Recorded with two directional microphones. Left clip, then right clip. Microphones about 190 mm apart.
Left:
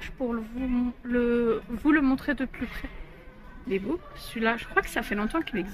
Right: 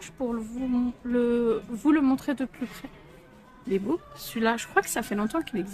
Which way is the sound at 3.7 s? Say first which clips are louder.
Right 2 dB; 30° right (ahead or behind).